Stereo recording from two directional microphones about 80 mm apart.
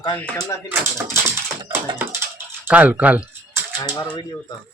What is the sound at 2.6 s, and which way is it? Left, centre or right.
Speech, right.